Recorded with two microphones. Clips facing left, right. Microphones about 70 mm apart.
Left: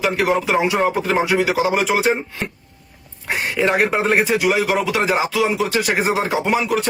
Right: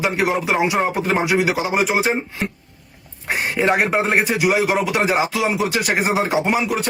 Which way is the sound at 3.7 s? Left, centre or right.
Centre.